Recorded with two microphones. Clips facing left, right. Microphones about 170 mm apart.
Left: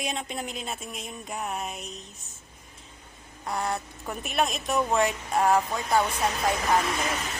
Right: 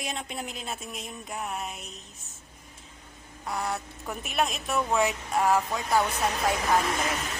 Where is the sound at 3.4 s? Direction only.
Centre (ahead or behind).